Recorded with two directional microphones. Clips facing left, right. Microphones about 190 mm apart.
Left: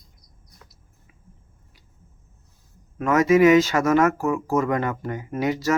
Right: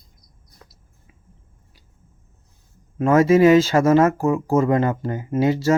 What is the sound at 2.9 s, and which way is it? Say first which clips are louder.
Speech: right 3 dB; 30° right (ahead or behind).